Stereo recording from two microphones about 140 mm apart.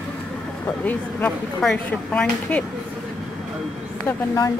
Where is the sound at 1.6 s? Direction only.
5° left (ahead or behind).